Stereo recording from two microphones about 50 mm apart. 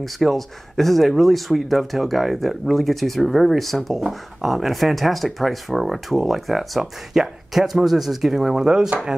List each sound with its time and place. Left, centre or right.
0.0 s speech: centre